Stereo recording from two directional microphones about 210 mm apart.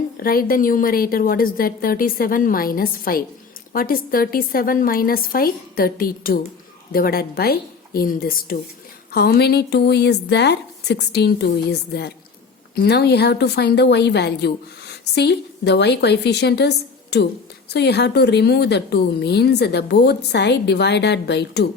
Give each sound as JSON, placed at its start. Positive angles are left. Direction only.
{"t": 0.2, "sound": "a woman's voice", "side_deg": 45}